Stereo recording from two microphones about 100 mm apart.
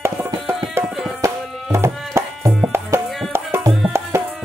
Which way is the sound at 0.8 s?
Centre (ahead or behind).